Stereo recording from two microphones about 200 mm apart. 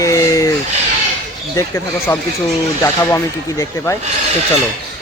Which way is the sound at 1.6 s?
15° left (ahead or behind).